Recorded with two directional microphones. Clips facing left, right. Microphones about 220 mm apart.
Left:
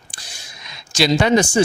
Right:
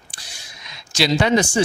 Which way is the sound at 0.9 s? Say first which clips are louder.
Left 2 dB; 45° left (ahead or behind).